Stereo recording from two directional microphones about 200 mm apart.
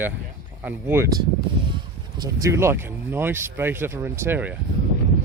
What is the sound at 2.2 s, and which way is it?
Speech, 15° right (ahead or behind).